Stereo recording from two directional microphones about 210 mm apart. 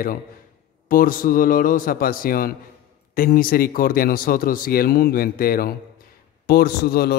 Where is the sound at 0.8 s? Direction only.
40° left (ahead or behind).